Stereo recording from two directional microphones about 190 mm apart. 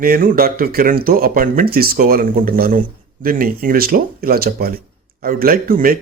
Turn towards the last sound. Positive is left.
turn(degrees=-50)  # may be behind; listen again after turning